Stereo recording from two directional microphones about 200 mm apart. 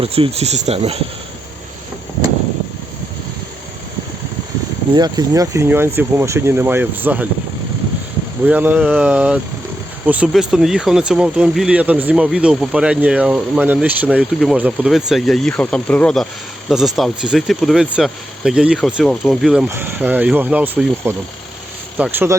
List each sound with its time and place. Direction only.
0.0 s speech: 30° right (ahead or behind)
4.9 s speech: 20° right (ahead or behind)
8.4 s speech: 10° right (ahead or behind)